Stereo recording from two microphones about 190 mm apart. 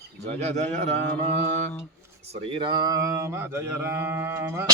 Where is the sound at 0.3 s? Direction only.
35° right (ahead or behind).